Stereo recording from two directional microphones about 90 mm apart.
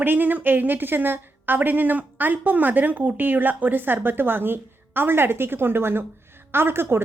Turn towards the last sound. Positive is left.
turn(degrees=-25)  # may be behind; listen again after turning